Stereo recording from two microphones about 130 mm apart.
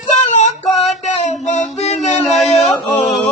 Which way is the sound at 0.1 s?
60° left (ahead or behind).